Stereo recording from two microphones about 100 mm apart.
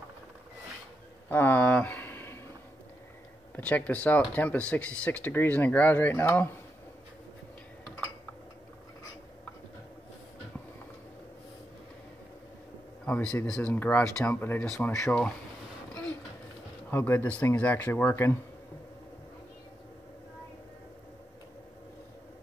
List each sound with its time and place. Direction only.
1.3 s speech: 20° left (ahead or behind)
3.5 s speech: 15° left (ahead or behind)
13.0 s speech: 10° left (ahead or behind)
16.9 s speech: 20° left (ahead or behind)